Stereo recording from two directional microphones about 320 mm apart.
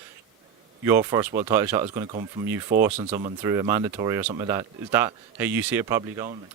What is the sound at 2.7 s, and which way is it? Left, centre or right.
Speech, right.